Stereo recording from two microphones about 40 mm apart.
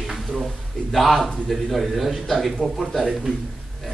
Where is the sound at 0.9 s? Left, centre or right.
Centre.